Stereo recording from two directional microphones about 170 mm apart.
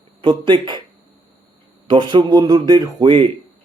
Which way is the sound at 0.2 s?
30° right (ahead or behind).